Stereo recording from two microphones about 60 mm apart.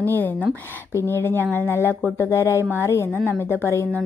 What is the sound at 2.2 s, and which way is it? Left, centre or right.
A woman's voice, left.